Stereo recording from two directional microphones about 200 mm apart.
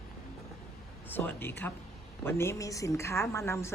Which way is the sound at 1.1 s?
10° left (ahead or behind).